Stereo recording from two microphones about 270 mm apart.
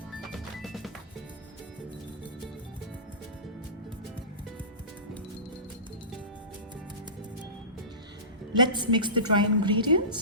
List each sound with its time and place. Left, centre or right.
0.6 s music: centre
8.5 s a woman's voice: centre